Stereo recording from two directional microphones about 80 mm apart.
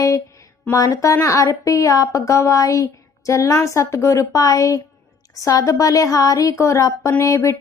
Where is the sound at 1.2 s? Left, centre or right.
Left.